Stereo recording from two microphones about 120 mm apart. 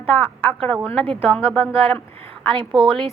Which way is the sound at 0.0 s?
10° left (ahead or behind).